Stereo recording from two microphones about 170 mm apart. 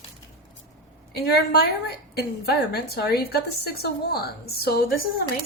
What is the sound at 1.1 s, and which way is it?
A woman's voice, 70° left (ahead or behind).